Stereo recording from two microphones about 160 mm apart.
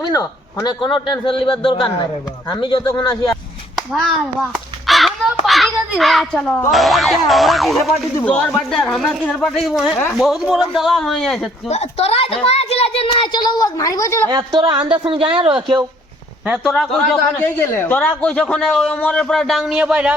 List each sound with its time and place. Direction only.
0.0 s a man's voice: 25° left (ahead or behind)
3.8 s hands: centre (ahead or behind)
6.7 s a man's voice: centre (ahead or behind)
11.7 s a woman's voice: 40° left (ahead or behind); by 14.2 s 20° left (ahead or behind)
14.3 s speech: 30° right (ahead or behind)
16.5 s a man's voice: centre (ahead or behind)
17.3 s a man's voice: 15° left (ahead or behind); by 20.1 s 5° right (ahead or behind)